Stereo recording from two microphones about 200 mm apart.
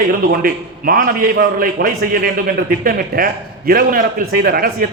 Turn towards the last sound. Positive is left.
turn(degrees=-50)  # may be behind; listen again after turning